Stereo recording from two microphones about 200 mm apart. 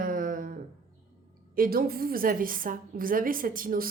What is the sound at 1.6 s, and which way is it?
Speech, 50° right (ahead or behind).